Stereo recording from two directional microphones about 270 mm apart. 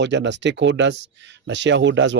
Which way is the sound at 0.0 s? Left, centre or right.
Right.